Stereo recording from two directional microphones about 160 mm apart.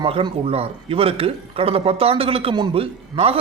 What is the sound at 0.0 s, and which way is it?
A man's voice, 35° right (ahead or behind).